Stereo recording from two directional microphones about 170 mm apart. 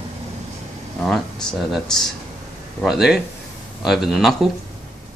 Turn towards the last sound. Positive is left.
turn(degrees=0)  # may be behind; listen again after turning